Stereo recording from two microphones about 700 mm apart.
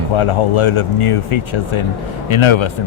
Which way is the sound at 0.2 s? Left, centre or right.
Left.